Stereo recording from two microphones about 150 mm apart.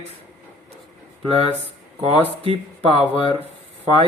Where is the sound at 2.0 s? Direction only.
40° right (ahead or behind).